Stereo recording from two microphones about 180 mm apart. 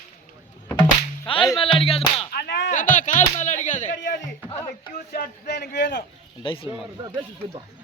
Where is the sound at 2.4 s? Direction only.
70° left (ahead or behind).